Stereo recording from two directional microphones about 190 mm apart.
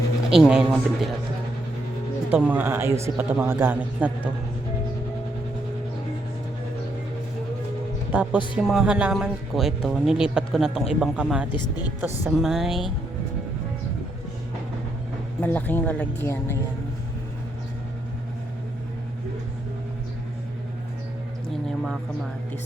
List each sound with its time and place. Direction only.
0.3 s speech: 5° right (ahead or behind)
2.3 s a man's voice: 5° right (ahead or behind)
8.1 s a man's voice: 10° right (ahead or behind)
15.4 s speech: 10° left (ahead or behind)